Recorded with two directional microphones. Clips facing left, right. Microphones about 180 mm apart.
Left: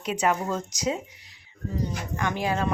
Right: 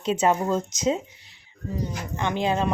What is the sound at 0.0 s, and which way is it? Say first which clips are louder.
Speech: right 3 dB; 25° right (ahead or behind).